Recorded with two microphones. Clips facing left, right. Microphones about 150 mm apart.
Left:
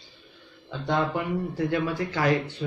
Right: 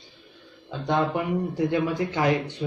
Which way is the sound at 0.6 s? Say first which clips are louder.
Right 2 dB; 20° right (ahead or behind).